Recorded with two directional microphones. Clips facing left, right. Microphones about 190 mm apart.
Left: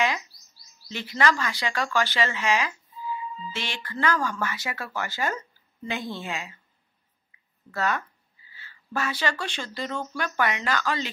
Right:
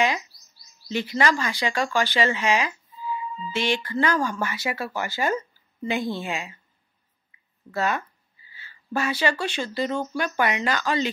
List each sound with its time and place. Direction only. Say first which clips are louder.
0.9 s speech: right 2 dB; 15° right (ahead or behind)
7.7 s speech: right 2 dB; 10° right (ahead or behind)